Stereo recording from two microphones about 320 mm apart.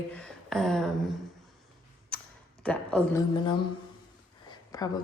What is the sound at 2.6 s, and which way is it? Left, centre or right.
A woman's voice, centre.